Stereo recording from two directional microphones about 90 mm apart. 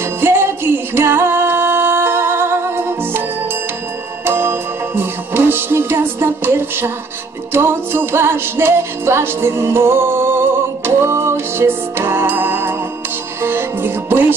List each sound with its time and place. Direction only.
0.2 s music: 25° right (ahead or behind)
4.3 s music: 25° right (ahead or behind)